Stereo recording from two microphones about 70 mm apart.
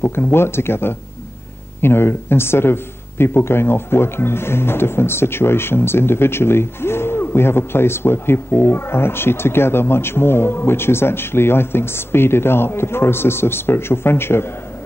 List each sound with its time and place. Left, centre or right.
0.0 s a man's voice: left